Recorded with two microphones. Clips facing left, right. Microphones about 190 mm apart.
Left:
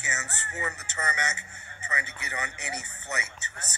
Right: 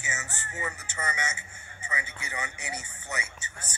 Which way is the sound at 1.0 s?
10° right (ahead or behind).